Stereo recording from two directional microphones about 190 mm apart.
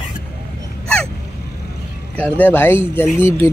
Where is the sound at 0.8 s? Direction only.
5° left (ahead or behind).